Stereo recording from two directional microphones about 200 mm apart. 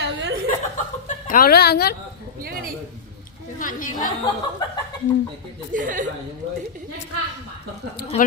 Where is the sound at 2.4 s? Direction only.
50° right (ahead or behind).